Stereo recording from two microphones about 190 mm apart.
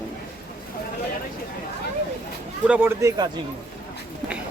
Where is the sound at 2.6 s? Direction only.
10° right (ahead or behind).